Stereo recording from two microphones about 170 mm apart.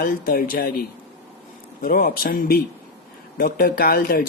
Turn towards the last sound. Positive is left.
turn(degrees=60)  # may be behind; listen again after turning